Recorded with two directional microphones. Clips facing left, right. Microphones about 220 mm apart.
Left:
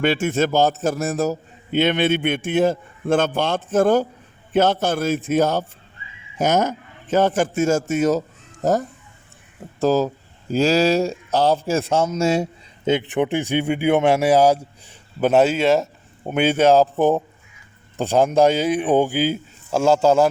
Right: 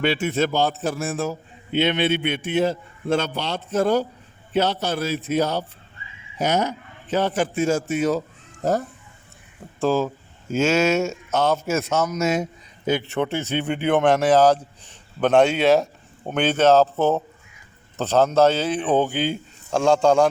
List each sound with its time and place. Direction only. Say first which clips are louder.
0.0 s a man's voice: left 2 dB; 45° left (ahead or behind)
9.8 s speech: left 3 dB; 40° left (ahead or behind); by 20.3 s 5° left (ahead or behind)